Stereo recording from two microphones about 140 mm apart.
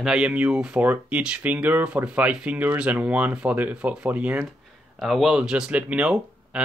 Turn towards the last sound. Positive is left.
turn(degrees=-10)  # may be behind; listen again after turning